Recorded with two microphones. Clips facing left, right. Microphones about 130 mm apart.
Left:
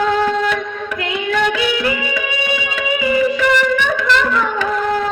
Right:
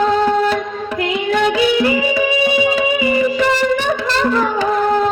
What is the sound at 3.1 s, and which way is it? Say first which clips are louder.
Music: left 3 dB; 30° right (ahead or behind).